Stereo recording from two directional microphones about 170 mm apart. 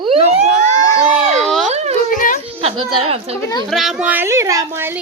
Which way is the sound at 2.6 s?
30° right (ahead or behind).